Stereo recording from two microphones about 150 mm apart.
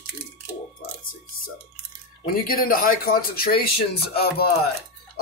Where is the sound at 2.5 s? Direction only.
70° left (ahead or behind); by 4.5 s 90° left.